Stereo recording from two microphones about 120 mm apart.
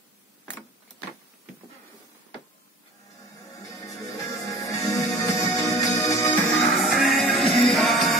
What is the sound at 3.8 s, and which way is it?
Music, 25° left (ahead or behind).